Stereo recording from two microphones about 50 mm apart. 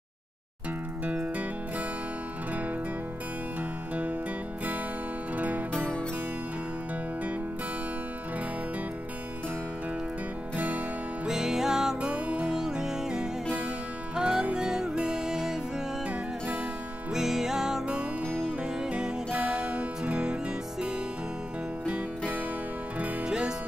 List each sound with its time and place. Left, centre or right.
1.0 s music: right
3.9 s music: right
5.3 s music: right
11.2 s music: centre
12.1 s music: right
12.5 s music: centre
17.1 s music: centre
23.2 s music: centre